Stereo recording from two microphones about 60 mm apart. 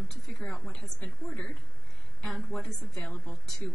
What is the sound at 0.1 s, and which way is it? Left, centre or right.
Speech, centre.